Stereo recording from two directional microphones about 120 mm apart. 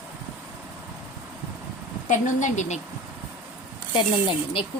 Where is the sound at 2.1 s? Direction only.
90° left.